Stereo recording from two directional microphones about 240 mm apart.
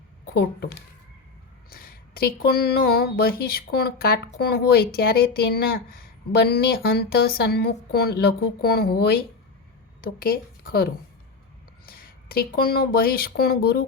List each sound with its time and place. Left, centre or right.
1.7 s a woman's voice: left
11.9 s speech: left